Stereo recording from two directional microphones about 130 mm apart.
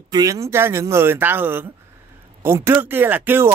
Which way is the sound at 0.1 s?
25° right (ahead or behind).